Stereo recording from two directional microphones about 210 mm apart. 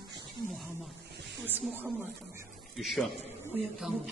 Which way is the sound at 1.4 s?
10° right (ahead or behind).